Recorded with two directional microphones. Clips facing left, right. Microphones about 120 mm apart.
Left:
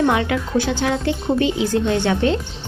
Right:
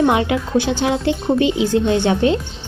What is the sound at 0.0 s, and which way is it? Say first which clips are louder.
A woman's voice: right 2 dB; 20° right (ahead or behind).